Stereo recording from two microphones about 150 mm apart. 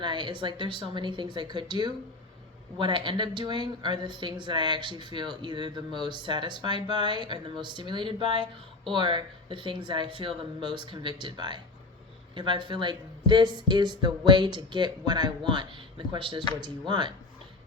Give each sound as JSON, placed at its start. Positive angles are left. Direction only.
{"t": 0.0, "sound": "speech", "side_deg": -30}